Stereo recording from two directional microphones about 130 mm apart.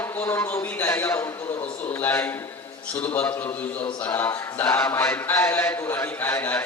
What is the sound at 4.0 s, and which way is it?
Chant, 15° left (ahead or behind).